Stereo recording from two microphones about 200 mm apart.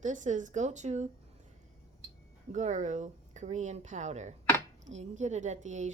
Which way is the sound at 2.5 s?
35° right (ahead or behind).